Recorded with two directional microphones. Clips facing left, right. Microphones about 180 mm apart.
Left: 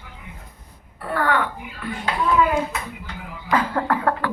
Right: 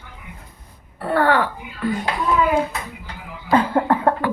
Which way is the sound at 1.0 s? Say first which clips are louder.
Right 4 dB; 30° right (ahead or behind).